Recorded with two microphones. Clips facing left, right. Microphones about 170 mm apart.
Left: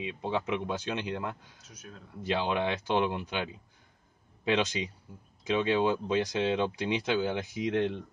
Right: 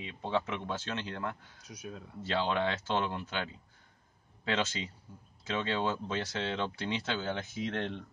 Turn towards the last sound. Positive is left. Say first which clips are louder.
# left 6 dB
turn(degrees=15)  # may be behind; listen again after turning